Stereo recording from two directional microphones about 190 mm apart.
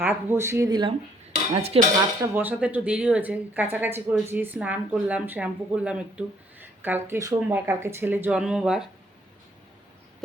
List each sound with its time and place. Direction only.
0.0 s speech: 10° right (ahead or behind)
1.3 s dishes: 35° right (ahead or behind)
2.2 s speech: 10° right (ahead or behind)